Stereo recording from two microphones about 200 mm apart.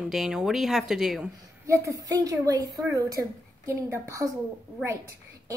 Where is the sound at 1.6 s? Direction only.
15° right (ahead or behind).